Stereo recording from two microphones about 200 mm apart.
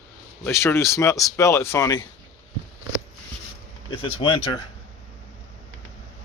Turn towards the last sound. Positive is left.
turn(degrees=25)  # may be behind; listen again after turning